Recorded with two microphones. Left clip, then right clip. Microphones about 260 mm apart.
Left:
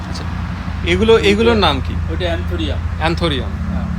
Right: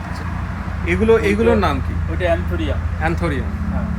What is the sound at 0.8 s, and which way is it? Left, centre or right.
Speech, centre.